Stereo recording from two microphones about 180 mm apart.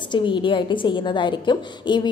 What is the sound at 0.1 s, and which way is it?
A woman's voice, 25° left (ahead or behind).